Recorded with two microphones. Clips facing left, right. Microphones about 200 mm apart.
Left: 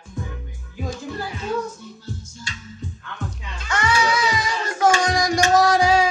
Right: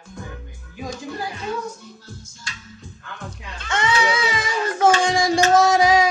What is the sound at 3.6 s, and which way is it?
Music, 25° right (ahead or behind).